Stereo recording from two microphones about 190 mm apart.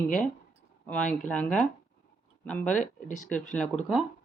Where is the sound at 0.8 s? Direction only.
5° left (ahead or behind).